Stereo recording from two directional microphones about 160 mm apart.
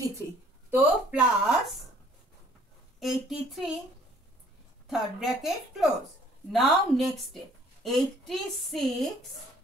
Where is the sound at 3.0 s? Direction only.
Centre (ahead or behind).